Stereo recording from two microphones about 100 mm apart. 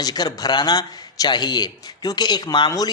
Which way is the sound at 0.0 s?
40° left (ahead or behind).